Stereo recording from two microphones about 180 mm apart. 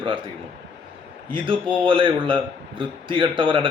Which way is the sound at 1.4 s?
30° right (ahead or behind).